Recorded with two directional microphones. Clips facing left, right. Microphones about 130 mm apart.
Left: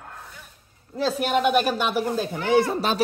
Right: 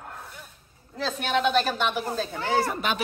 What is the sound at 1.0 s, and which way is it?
Speech, 5° left (ahead or behind).